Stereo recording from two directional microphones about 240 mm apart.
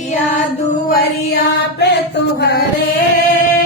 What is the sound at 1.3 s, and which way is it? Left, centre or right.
Chant, left.